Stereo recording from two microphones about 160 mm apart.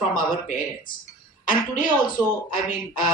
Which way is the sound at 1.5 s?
60° left (ahead or behind).